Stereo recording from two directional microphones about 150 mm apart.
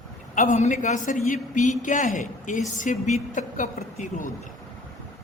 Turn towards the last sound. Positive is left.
turn(degrees=55)  # may be behind; listen again after turning